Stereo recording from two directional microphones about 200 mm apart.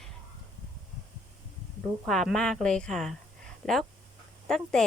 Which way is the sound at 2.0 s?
Centre (ahead or behind).